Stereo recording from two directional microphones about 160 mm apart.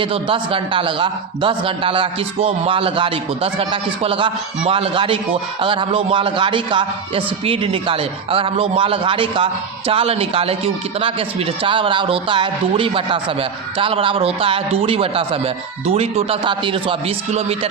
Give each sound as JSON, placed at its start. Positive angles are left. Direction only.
{"t": 0.0, "sound": "a man's voice", "side_deg": -35}